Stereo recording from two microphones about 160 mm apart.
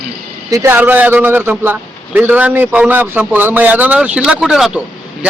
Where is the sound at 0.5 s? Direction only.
15° right (ahead or behind).